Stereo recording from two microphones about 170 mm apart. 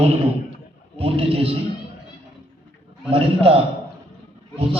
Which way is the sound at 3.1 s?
35° right (ahead or behind).